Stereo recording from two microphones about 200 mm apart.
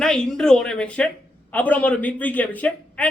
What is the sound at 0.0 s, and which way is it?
A man's voice, 5° left (ahead or behind).